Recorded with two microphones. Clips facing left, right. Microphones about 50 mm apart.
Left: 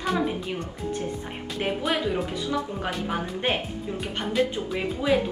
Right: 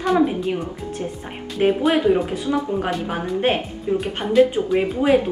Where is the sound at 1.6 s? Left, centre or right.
Centre.